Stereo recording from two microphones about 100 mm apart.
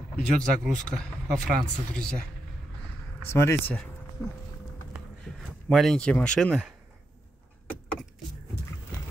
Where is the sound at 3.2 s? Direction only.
25° left (ahead or behind).